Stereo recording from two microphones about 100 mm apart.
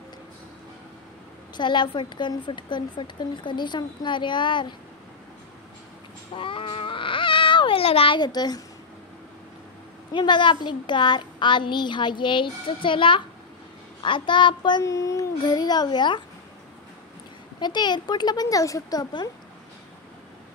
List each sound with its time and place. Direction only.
1.6 s a woman's voice: 50° left (ahead or behind)
6.3 s a sound: 60° left (ahead or behind)
8.2 s a woman's voice: 45° left (ahead or behind)
10.1 s a woman's voice: 50° left (ahead or behind)
14.9 s a child's voice: 30° left (ahead or behind)
15.4 s a woman's voice: 45° left (ahead or behind)
17.6 s a woman's voice: 45° left (ahead or behind)